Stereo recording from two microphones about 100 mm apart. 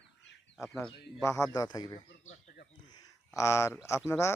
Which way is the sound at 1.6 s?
45° left (ahead or behind).